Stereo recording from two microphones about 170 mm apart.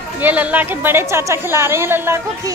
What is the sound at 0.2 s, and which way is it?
A woman's voice, 10° right (ahead or behind).